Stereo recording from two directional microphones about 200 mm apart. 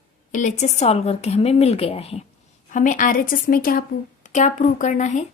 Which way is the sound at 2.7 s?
40° left (ahead or behind).